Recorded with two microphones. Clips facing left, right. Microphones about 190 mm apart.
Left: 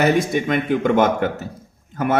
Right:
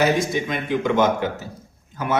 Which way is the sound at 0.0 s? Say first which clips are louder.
Left 2 dB; 55° left (ahead or behind).